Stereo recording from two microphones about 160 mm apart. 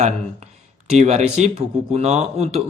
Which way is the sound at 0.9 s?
45° right (ahead or behind).